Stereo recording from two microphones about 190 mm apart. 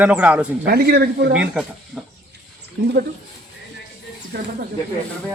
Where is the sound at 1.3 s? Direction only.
5° right (ahead or behind).